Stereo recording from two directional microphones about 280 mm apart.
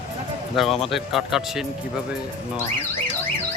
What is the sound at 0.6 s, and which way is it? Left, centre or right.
Speech, centre.